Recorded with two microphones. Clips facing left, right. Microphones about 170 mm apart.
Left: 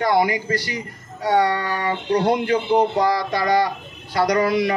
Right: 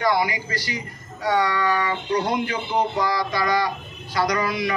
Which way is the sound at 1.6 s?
35° left (ahead or behind).